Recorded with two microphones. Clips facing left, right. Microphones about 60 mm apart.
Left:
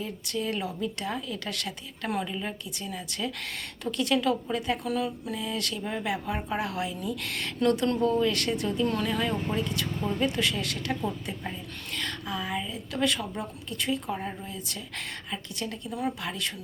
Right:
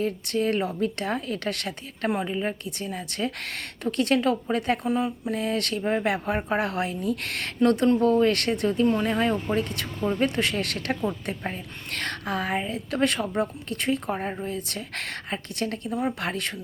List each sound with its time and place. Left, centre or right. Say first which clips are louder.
0.0 s a woman's voice: right 7 dB; right
2.0 s a woman's voice: right 5 dB; right
2.6 s a woman's voice: right 4 dB; right
4.9 s a woman's voice: right 4 dB; right
5.3 s a woman's voice: right 6 dB; right
8.9 s speech: right 5 dB; right
9.6 s a woman's voice: right 2 dB; right
15.9 s speech: right 3 dB; right
16.2 s a woman's voice: right 4 dB; right